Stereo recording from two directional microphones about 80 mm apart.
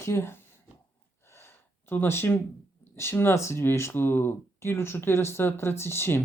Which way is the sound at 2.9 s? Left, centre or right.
Left.